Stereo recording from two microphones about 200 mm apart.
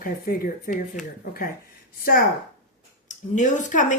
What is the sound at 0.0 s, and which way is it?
Speech, 45° left (ahead or behind).